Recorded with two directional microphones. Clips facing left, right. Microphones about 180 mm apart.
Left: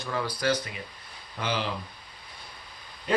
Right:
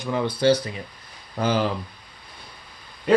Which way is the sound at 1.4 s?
45° right (ahead or behind).